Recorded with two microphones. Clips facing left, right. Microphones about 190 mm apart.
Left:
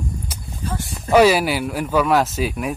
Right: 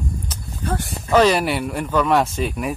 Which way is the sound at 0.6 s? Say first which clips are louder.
Right 3 dB; 60° right (ahead or behind).